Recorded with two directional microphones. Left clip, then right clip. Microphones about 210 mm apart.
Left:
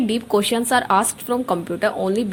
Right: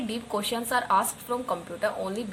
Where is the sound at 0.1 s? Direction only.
35° left (ahead or behind).